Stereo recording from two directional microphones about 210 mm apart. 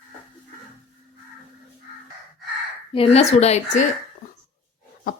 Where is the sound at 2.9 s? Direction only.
30° left (ahead or behind).